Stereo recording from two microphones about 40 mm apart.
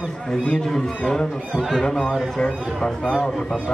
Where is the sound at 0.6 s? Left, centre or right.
Centre.